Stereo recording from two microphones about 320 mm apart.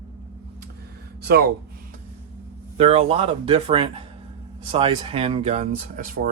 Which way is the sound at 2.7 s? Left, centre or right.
Centre.